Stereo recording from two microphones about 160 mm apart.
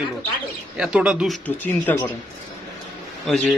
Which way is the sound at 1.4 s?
10° left (ahead or behind).